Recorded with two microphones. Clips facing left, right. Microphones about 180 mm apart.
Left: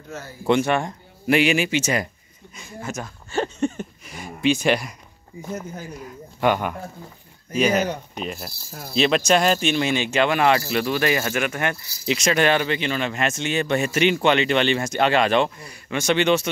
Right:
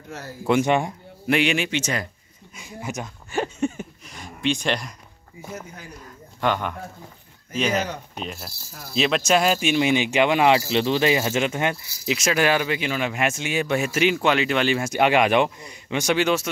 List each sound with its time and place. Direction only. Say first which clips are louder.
0.5 s speech: even; 15° right (ahead or behind)
1.2 s speech: left 3 dB; 5° left (ahead or behind)
2.5 s a sound: even; 15° right (ahead or behind)
4.0 s a sound: left 4 dB; 5° left (ahead or behind)
5.4 s speech: left 5 dB; centre (ahead or behind)
5.9 s a man's voice: left 4 dB; 10° left (ahead or behind); by 11.8 s 20° right (ahead or behind)
12.1 s speech: left 1 dB; 5° right (ahead or behind)